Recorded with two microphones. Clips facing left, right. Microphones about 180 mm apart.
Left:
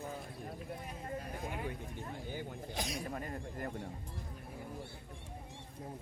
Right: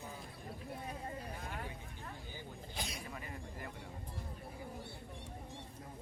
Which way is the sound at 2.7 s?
45° left (ahead or behind).